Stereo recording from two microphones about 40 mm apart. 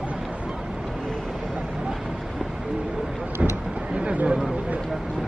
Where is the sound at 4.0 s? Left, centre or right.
Right.